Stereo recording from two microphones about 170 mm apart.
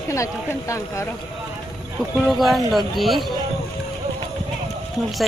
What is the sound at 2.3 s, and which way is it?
Speech, centre (ahead or behind).